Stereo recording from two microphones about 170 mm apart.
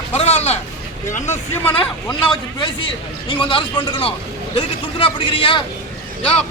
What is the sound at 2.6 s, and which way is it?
A man's voice, 30° left (ahead or behind).